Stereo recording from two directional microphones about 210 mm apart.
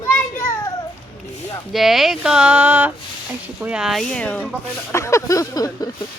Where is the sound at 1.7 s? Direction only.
Centre (ahead or behind).